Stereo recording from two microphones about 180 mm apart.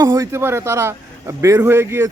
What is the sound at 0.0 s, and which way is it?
Speech, 15° right (ahead or behind).